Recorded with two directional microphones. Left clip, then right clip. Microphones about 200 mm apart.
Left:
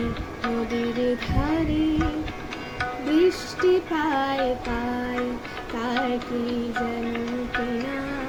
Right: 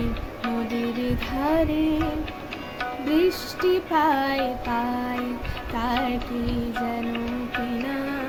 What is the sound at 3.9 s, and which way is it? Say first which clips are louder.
Child singing: right 3 dB; 15° right (ahead or behind).